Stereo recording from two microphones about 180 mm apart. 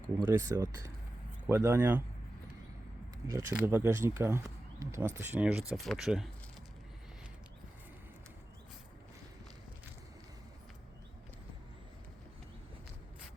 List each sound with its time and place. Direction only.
0.3 s speech: 20° right (ahead or behind)
3.2 s speech: 15° right (ahead or behind)